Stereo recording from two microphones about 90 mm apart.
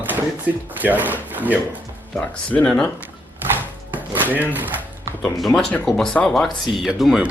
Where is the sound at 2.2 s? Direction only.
10° left (ahead or behind).